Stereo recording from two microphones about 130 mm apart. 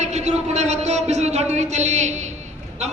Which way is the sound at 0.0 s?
60° right (ahead or behind).